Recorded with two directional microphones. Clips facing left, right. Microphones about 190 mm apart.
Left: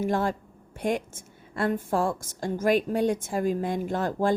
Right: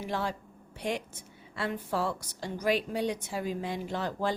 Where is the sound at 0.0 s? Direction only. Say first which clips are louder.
Left 7 dB; 50° left (ahead or behind).